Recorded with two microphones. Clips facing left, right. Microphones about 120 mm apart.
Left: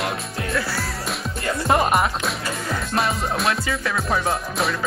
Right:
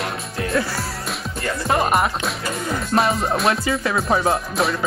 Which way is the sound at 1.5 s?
Centre (ahead or behind).